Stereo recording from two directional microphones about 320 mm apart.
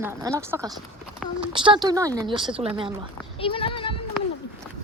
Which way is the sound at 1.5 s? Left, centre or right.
Centre.